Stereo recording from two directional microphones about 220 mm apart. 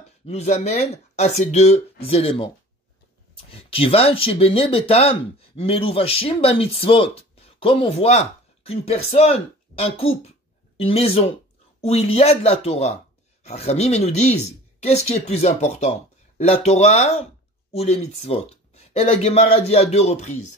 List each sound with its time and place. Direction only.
0.3 s speech: 30° left (ahead or behind)
3.7 s speech: 25° left (ahead or behind)